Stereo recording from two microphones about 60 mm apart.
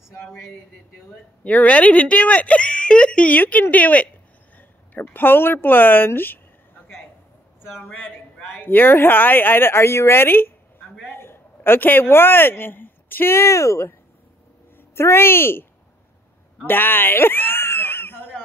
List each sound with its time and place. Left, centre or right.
1.4 s speech: left
7.9 s a man's voice: left
15.0 s a man's voice: left
16.6 s a sound: left